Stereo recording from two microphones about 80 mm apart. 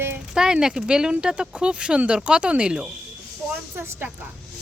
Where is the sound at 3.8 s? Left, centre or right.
Right.